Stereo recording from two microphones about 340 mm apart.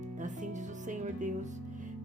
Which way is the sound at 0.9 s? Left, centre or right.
Right.